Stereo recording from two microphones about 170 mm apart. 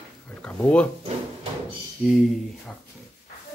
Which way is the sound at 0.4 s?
5° left (ahead or behind).